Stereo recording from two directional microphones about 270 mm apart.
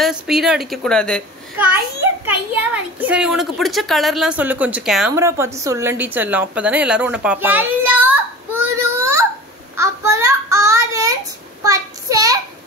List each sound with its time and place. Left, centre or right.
0.0 s a child's voice: centre
9.8 s child singing: centre